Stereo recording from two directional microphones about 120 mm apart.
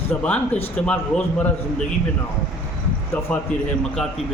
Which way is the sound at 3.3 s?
10° left (ahead or behind).